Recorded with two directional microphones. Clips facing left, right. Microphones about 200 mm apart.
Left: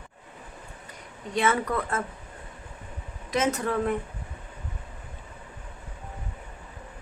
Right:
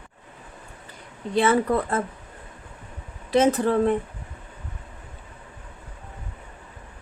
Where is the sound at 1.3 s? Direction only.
30° right (ahead or behind).